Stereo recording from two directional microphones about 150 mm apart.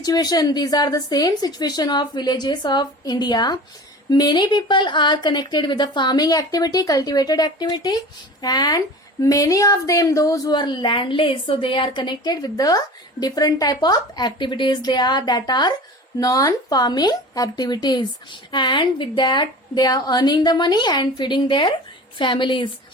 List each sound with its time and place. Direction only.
0.0 s a woman's voice: 25° left (ahead or behind)